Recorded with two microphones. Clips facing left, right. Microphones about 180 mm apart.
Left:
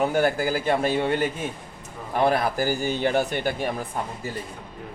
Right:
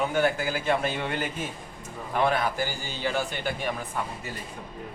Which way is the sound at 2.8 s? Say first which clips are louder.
Left 8 dB; 55° left (ahead or behind).